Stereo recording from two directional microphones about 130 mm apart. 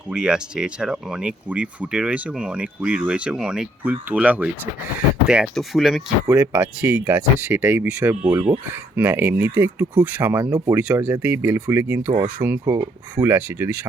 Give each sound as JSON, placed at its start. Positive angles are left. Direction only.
{"t": 0.1, "sound": "speech", "side_deg": -5}
{"t": 5.5, "sound": "speech", "side_deg": 0}
{"t": 6.2, "sound": "speech", "side_deg": -15}